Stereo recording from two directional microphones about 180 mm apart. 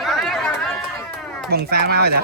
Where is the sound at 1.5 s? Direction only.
60° right (ahead or behind).